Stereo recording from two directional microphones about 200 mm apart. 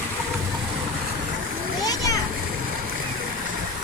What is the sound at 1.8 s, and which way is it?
Splash, 20° left (ahead or behind).